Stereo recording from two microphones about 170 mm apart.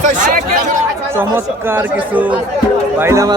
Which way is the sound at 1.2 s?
10° right (ahead or behind).